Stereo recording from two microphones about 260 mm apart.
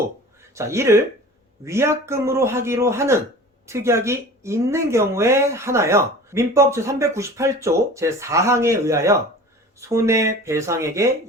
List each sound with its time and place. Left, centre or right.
0.5 s speech: centre